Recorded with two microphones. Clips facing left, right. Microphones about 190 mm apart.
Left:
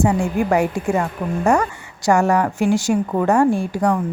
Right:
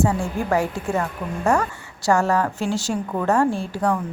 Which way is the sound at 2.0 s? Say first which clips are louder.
Left 3 dB; 15° left (ahead or behind).